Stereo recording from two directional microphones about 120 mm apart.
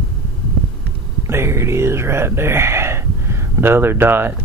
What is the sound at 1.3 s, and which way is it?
Speech, 20° right (ahead or behind).